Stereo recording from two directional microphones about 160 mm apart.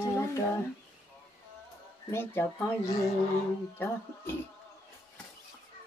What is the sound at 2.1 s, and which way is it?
Speech, 15° left (ahead or behind).